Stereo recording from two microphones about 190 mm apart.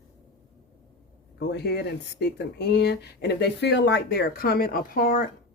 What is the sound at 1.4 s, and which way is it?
Speech, 60° left (ahead or behind).